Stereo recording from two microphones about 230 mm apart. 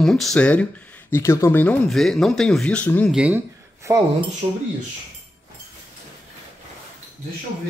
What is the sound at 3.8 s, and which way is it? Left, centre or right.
Speech, centre.